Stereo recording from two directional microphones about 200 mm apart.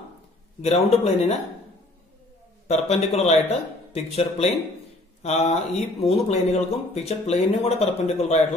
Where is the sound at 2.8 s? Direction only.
30° left (ahead or behind).